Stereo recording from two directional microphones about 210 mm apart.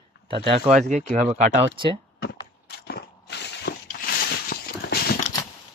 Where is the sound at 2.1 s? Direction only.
55° left (ahead or behind).